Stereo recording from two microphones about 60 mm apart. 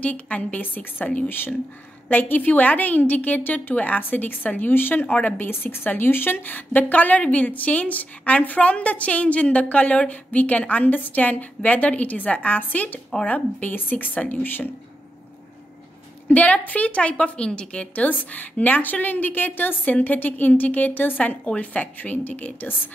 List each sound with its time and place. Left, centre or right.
0.0 s a woman's voice: left
5.0 s a woman's voice: centre
5.4 s a woman's voice: left
16.3 s a woman's voice: left